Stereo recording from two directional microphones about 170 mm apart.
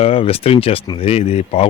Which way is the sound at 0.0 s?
35° left (ahead or behind).